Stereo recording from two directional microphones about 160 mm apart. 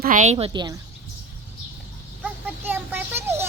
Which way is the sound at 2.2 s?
10° right (ahead or behind).